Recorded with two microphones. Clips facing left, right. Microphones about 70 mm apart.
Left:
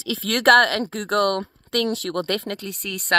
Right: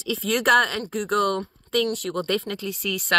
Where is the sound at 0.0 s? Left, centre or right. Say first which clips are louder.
Left 3 dB; left.